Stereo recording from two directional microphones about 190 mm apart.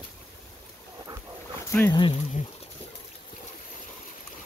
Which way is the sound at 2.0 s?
30° left (ahead or behind).